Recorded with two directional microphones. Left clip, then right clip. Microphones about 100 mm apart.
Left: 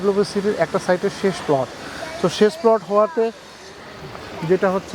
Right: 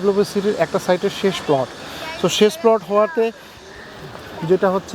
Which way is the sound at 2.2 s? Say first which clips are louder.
Right 1 dB; 15° right (ahead or behind).